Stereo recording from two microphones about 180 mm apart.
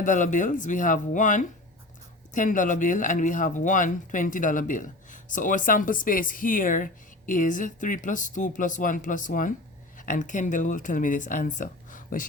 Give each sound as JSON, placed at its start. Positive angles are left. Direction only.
{"t": 0.0, "sound": "speech", "side_deg": 45}